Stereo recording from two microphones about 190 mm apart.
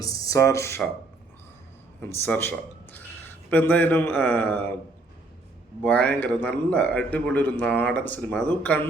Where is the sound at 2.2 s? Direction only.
10° left (ahead or behind).